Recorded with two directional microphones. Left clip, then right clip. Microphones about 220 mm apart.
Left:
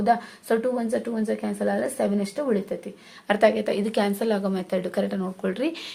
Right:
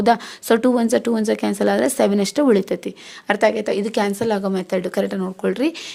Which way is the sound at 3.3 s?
30° right (ahead or behind).